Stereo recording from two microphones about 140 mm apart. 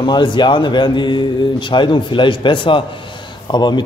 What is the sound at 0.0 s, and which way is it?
A man's voice, 35° left (ahead or behind).